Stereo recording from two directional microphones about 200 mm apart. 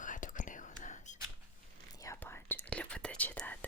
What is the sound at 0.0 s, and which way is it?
Whispering, 40° left (ahead or behind).